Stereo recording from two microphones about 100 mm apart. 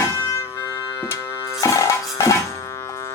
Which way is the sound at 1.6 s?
35° left (ahead or behind).